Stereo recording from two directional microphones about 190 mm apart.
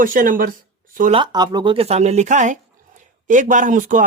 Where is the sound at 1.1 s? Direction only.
25° right (ahead or behind).